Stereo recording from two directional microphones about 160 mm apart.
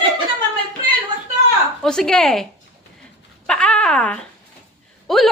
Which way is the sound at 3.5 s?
5° left (ahead or behind).